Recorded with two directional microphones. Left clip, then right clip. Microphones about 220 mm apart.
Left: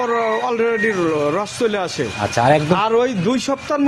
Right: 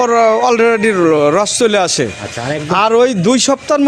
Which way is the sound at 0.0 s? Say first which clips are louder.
Right 8 dB; 50° right (ahead or behind).